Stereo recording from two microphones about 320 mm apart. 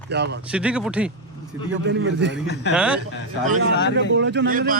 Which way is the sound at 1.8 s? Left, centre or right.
Right.